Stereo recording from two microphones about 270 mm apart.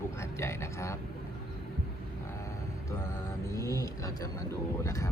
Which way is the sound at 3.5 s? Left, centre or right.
Centre.